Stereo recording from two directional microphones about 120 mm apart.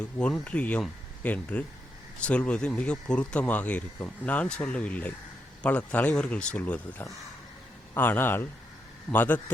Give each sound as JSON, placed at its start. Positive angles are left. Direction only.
{"t": 0.3, "sound": "speech", "side_deg": 10}
{"t": 7.9, "sound": "speech", "side_deg": 15}